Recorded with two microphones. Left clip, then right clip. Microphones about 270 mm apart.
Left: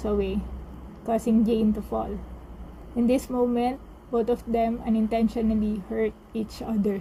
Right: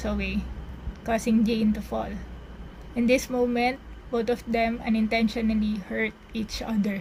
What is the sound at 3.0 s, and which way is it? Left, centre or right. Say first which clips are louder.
Speech: right 1 dB; right.